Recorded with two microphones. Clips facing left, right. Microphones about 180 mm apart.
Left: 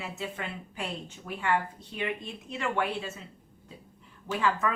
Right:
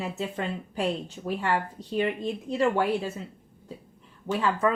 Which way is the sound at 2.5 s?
35° right (ahead or behind).